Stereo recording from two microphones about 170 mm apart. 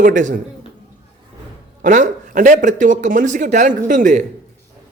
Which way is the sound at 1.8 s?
50° right (ahead or behind).